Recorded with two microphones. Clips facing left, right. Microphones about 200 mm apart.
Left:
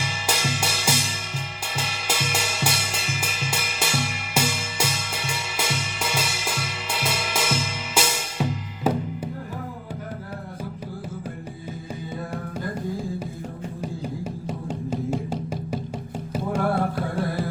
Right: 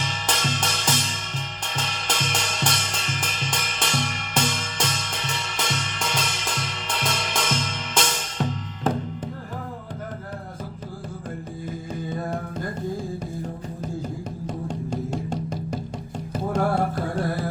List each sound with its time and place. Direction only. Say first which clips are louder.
0.0 s music: even; 10° left (ahead or behind)
13.8 s music: even; 10° left (ahead or behind)